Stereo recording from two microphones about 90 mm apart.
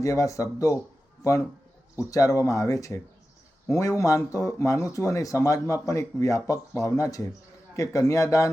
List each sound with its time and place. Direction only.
0.0 s a man's voice: 35° left (ahead or behind)
2.0 s a man's voice: 40° left (ahead or behind)